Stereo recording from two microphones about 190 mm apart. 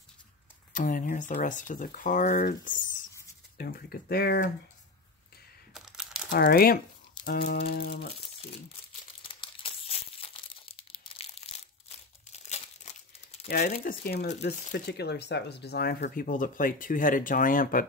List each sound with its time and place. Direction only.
0.7 s speech: 45° left (ahead or behind)
5.7 s crumpling: centre (ahead or behind)
6.3 s speech: 50° left (ahead or behind)
9.3 s crumpling: 30° left (ahead or behind)
13.5 s speech: 50° left (ahead or behind)